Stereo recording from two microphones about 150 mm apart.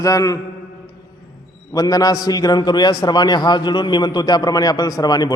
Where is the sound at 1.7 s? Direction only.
25° left (ahead or behind).